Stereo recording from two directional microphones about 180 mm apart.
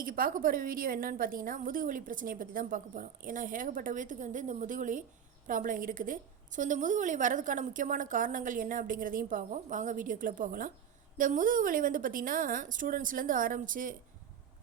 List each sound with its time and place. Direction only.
0.0 s a woman's voice: 50° right (ahead or behind)